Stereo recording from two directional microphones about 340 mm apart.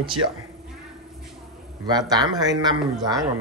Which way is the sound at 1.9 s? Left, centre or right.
Centre.